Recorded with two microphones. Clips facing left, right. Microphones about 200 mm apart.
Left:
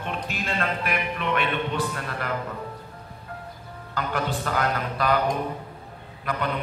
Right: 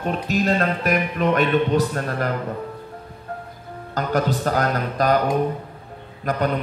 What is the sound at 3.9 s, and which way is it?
Speech, 40° right (ahead or behind).